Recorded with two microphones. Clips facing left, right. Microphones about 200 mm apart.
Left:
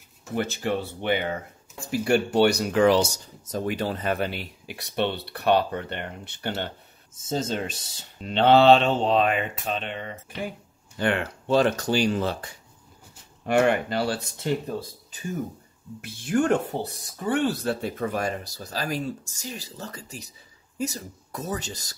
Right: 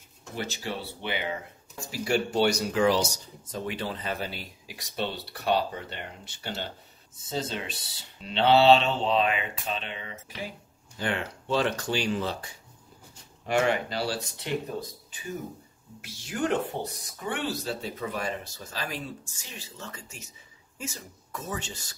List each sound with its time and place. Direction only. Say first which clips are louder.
0.4 s speech: left 7 dB; 55° left (ahead or behind)
3.4 s speech: left 6 dB; 45° left (ahead or behind)
7.2 s speech: left 5 dB; 45° left (ahead or behind)
13.5 s speech: left 4 dB; 55° left (ahead or behind)
16.0 s speech: left 7 dB; 55° left (ahead or behind)
16.7 s speech: left 4 dB; 35° left (ahead or behind)
17.5 s speech: left 5 dB; 55° left (ahead or behind); by 21.9 s 40° left (ahead or behind)